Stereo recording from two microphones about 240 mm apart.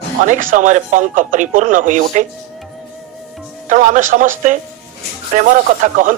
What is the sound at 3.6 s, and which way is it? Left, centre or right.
Speech, right.